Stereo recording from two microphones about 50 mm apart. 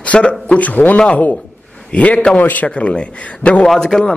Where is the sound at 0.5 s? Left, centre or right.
Left.